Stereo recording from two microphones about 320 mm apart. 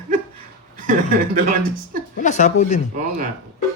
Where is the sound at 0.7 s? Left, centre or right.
Right.